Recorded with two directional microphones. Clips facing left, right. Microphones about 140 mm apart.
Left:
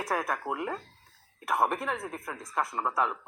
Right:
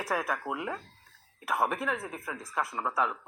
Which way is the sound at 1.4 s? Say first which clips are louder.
Left 2 dB; 5° right (ahead or behind).